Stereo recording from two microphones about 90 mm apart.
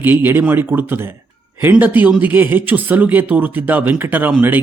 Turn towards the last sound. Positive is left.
turn(degrees=-20)  # may be behind; listen again after turning